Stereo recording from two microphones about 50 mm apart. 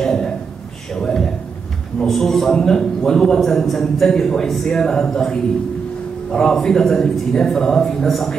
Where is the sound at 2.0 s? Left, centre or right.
Centre.